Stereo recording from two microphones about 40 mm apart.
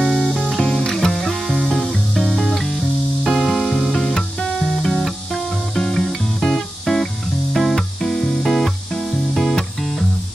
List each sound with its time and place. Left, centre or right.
0.6 s music: centre
1.1 s music: centre
1.8 s music: centre
3.9 s music: centre